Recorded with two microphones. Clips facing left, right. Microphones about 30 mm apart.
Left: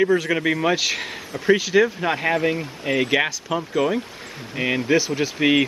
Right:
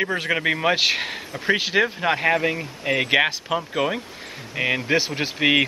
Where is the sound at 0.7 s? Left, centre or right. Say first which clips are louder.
Right 3 dB; right.